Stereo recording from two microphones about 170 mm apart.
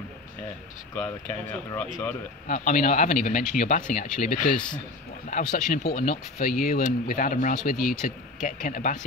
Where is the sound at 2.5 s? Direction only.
50° left (ahead or behind).